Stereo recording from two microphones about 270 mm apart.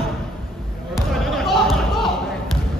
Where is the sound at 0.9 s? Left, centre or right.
Centre.